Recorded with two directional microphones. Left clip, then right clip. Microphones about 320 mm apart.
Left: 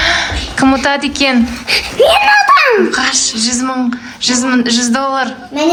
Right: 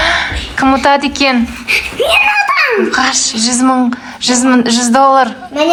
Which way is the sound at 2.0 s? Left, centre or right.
Left.